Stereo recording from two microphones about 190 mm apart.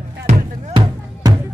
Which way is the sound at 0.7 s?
25° right (ahead or behind).